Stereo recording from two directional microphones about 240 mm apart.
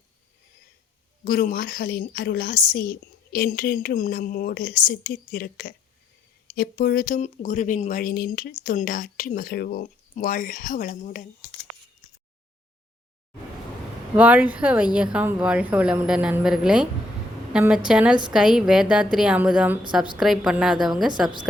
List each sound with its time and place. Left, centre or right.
1.2 s a woman's voice: left
14.2 s a woman's voice: centre